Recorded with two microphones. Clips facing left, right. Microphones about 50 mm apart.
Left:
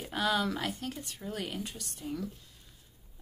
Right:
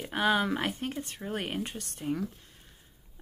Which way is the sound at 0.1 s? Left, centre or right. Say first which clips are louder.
Right 3 dB; right.